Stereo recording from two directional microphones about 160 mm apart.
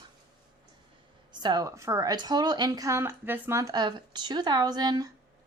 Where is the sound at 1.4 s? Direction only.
25° right (ahead or behind).